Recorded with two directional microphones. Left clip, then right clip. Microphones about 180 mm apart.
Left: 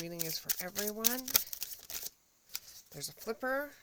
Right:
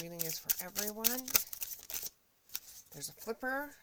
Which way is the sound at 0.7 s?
50° left (ahead or behind).